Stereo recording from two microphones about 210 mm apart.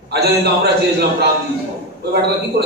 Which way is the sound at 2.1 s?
50° right (ahead or behind).